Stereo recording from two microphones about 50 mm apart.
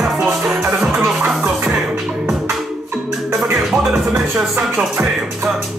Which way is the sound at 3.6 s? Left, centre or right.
Centre.